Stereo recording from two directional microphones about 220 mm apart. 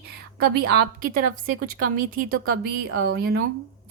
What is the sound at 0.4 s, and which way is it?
Speech, 45° right (ahead or behind).